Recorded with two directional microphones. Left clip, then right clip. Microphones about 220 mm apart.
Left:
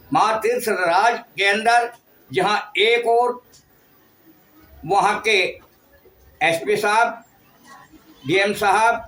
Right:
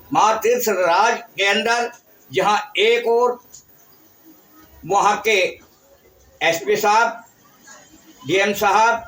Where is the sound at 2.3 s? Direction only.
15° left (ahead or behind).